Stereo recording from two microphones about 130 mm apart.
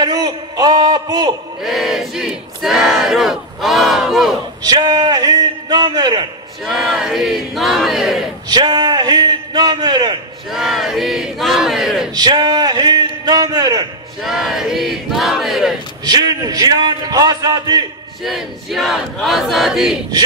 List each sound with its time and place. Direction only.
0.0 s a man's voice: 30° right (ahead or behind)
1.6 s battle cry: centre (ahead or behind)
4.6 s a man's voice: 35° right (ahead or behind)
6.6 s battle cry: centre (ahead or behind)
8.5 s a man's voice: 30° right (ahead or behind)
10.5 s battle cry: centre (ahead or behind)
12.2 s a sound: 30° right (ahead or behind)
14.2 s a sound: centre (ahead or behind)
16.0 s a man's voice: 30° right (ahead or behind)
18.2 s battle cry: centre (ahead or behind)